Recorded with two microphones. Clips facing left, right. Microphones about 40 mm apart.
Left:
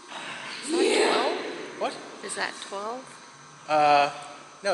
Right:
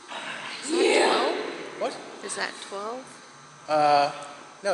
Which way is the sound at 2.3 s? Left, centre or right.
Centre.